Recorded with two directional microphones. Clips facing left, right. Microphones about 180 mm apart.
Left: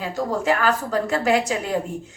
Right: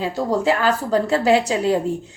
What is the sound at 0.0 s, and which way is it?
A woman's voice, 30° right (ahead or behind).